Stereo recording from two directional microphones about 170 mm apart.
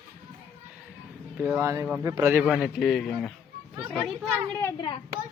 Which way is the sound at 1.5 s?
15° right (ahead or behind).